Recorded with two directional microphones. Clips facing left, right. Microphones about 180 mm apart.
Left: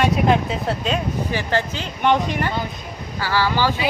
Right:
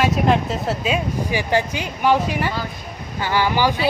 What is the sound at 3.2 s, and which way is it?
Speech, 20° right (ahead or behind).